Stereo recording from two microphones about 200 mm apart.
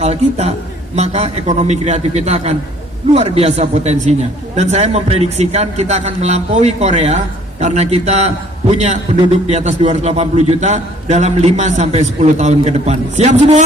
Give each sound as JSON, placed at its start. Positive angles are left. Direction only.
{"t": 0.0, "sound": "a man's voice", "side_deg": -35}